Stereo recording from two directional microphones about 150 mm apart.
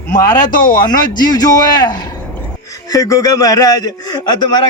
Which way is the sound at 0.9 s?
25° left (ahead or behind).